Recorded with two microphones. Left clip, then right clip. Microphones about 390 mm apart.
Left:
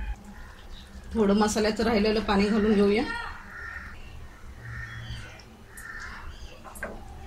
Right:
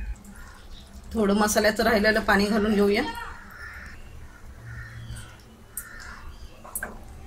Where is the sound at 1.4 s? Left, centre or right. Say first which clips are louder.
Right 4 dB; centre.